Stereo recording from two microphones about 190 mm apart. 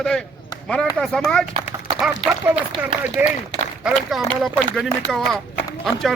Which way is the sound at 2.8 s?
5° right (ahead or behind).